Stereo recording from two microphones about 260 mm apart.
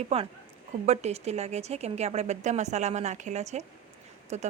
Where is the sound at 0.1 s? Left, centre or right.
Right.